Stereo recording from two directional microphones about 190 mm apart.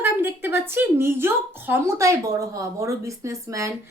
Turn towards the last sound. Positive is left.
turn(degrees=-15)  # may be behind; listen again after turning